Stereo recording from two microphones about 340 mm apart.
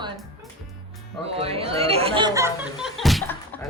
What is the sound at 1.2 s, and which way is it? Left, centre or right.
A woman's voice, centre.